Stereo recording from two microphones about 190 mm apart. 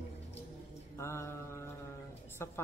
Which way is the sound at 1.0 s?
15° left (ahead or behind).